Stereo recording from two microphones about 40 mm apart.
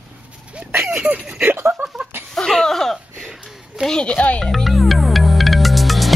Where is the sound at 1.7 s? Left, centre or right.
Right.